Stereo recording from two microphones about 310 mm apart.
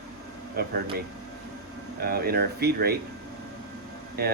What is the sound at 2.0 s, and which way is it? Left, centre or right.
Speech, right.